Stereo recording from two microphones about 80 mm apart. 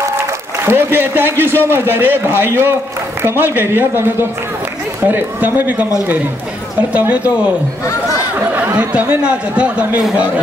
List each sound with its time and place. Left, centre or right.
0.7 s a man's voice: right
6.9 s speech: centre
8.4 s speech: right